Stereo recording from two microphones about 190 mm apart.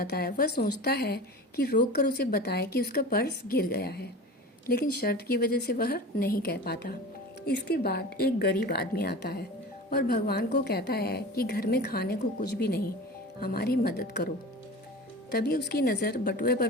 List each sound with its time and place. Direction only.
0.0 s a woman's voice: 55° left (ahead or behind)